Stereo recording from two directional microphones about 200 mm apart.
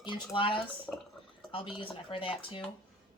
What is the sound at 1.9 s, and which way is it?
Speech, 25° left (ahead or behind).